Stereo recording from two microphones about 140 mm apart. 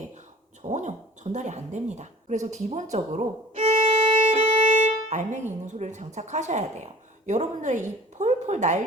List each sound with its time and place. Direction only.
0.7 s a woman's voice: 60° right (ahead or behind)
2.9 s violin: 55° right (ahead or behind)
5.0 s a woman's voice: 55° right (ahead or behind)